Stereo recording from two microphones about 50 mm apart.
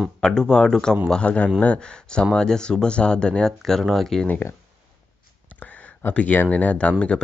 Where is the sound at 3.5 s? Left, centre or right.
Centre.